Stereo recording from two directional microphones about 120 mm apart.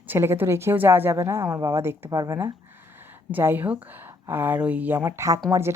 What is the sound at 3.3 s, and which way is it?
A woman's voice, 15° right (ahead or behind).